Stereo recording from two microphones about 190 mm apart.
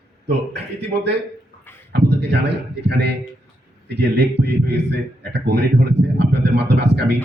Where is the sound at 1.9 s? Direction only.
60° right (ahead or behind).